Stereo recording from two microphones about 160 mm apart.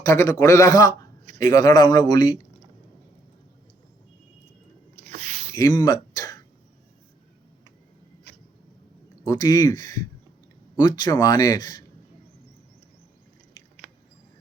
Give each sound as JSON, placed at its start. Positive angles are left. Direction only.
{"t": 0.0, "sound": "speech", "side_deg": 20}
{"t": 5.1, "sound": "a sound", "side_deg": -45}
{"t": 5.5, "sound": "speech", "side_deg": 20}
{"t": 9.2, "sound": "speech", "side_deg": 25}